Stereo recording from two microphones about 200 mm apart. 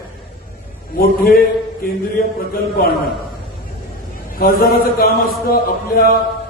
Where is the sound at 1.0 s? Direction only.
50° left (ahead or behind).